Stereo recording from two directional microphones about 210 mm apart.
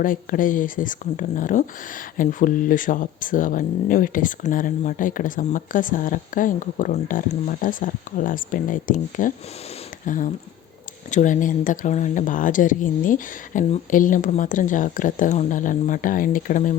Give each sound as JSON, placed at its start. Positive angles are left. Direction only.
{"t": 0.0, "sound": "speech", "side_deg": 40}
{"t": 11.1, "sound": "speech", "side_deg": 35}